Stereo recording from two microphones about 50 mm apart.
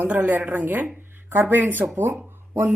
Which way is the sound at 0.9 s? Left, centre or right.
Right.